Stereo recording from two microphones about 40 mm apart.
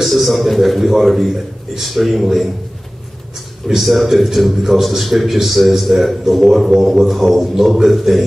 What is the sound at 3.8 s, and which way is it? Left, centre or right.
A man's voice, centre.